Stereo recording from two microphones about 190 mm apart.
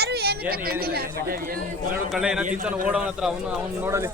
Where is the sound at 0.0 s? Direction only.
55° right (ahead or behind).